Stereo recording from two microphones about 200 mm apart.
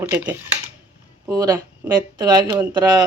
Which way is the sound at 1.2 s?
15° right (ahead or behind).